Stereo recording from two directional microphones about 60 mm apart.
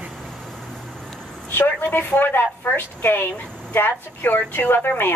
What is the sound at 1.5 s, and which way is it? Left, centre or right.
Speech, left.